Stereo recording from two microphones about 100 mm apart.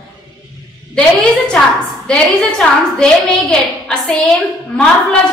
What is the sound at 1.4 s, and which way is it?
A woman's voice, 10° left (ahead or behind).